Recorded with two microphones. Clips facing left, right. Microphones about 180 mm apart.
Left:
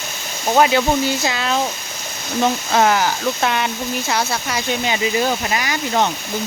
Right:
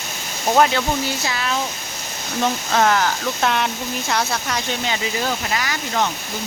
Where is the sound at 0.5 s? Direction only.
5° left (ahead or behind).